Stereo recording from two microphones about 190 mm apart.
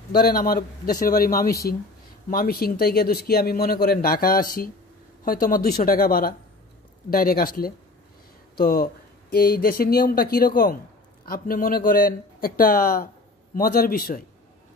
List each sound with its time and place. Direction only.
0.1 s speech: 50° left (ahead or behind)